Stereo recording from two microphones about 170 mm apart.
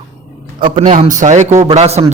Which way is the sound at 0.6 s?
45° right (ahead or behind).